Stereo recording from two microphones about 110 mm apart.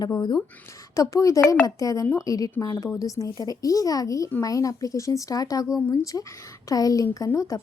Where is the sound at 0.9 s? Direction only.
30° left (ahead or behind).